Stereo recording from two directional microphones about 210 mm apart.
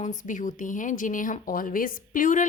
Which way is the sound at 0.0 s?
35° left (ahead or behind).